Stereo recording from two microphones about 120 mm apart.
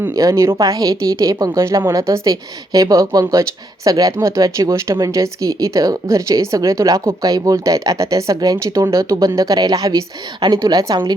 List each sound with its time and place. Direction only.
0.1 s a woman's voice: 30° right (ahead or behind)